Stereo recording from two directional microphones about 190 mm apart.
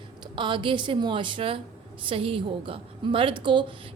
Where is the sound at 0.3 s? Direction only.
25° right (ahead or behind).